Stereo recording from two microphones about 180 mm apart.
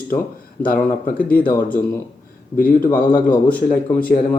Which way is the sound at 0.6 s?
50° left (ahead or behind).